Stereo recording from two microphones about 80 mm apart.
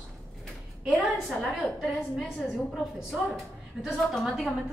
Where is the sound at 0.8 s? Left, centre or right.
Centre.